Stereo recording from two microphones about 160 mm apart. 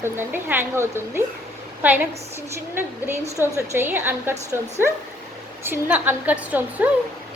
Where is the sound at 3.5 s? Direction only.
15° right (ahead or behind).